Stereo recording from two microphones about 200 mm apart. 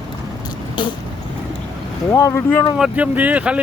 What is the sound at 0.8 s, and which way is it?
Vehicle, 25° left (ahead or behind).